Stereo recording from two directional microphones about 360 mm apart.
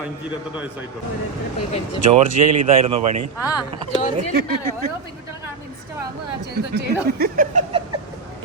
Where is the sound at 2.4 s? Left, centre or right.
Right.